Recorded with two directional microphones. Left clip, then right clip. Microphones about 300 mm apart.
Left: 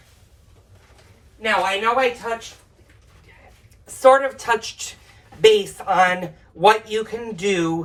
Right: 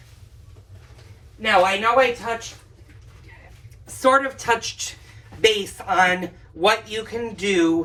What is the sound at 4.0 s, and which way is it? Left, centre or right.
Speech, centre.